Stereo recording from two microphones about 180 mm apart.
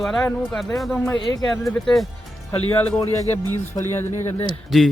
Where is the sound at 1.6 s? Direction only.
Centre (ahead or behind).